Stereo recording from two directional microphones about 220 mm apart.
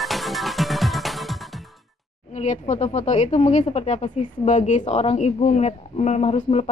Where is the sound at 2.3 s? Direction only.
35° left (ahead or behind).